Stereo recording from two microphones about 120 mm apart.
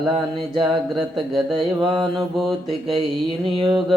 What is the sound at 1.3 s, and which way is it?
Mantra, 40° right (ahead or behind).